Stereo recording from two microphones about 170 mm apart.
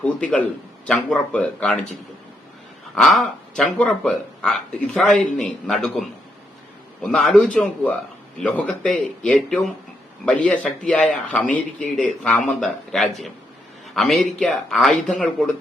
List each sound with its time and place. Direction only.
0.0 s a man's voice: 5° left (ahead or behind)
2.9 s speech: centre (ahead or behind)